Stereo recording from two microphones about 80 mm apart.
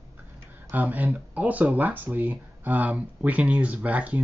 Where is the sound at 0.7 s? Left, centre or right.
Right.